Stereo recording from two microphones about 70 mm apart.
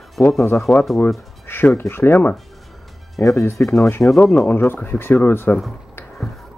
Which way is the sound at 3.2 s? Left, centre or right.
Left.